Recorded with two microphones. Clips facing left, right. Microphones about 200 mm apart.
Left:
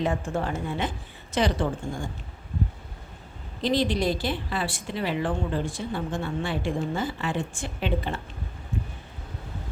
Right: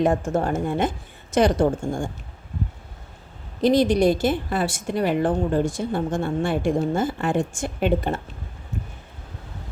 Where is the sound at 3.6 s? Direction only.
50° right (ahead or behind).